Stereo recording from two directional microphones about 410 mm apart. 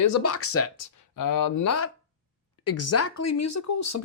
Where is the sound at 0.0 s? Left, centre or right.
Left.